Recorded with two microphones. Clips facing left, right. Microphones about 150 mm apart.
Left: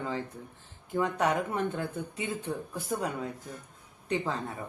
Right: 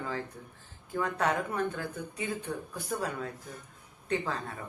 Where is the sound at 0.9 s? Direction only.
20° left (ahead or behind).